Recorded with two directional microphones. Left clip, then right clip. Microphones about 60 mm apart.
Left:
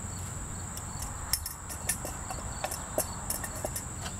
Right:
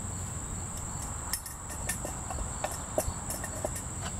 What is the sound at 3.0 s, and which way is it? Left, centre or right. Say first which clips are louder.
Train: right 1 dB; centre.